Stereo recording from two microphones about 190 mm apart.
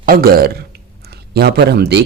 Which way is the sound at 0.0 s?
50° right (ahead or behind).